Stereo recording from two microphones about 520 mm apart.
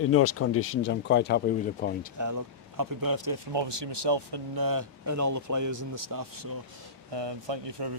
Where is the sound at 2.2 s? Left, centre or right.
Right.